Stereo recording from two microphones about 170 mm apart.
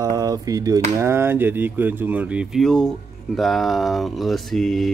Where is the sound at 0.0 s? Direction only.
20° right (ahead or behind).